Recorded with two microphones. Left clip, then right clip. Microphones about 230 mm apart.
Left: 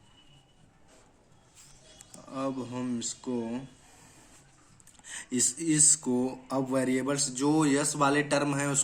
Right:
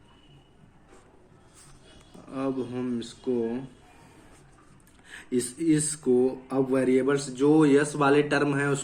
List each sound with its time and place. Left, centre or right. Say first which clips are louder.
2.3 s speech: right 3 dB; left
5.0 s speech: right 2 dB; left